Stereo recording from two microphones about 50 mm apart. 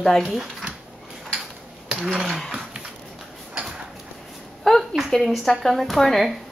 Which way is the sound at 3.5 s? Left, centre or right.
Centre.